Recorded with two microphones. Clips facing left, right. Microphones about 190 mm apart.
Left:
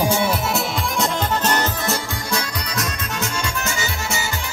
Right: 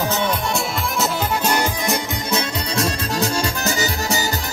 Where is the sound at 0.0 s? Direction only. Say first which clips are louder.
Left 2 dB; 10° left (ahead or behind).